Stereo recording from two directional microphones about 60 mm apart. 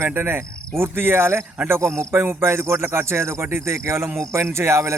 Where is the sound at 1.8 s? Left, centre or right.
Right.